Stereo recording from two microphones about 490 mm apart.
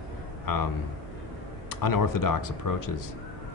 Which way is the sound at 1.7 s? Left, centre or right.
Left.